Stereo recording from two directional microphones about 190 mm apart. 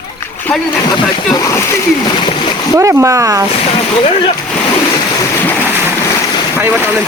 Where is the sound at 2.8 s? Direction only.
15° right (ahead or behind).